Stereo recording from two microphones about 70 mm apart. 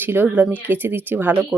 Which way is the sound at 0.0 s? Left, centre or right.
Right.